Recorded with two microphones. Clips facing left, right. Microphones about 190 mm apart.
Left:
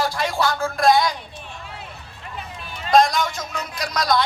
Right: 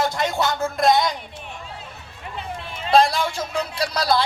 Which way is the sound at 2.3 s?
25° right (ahead or behind).